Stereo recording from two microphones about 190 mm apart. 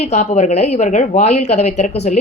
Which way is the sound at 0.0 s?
35° left (ahead or behind).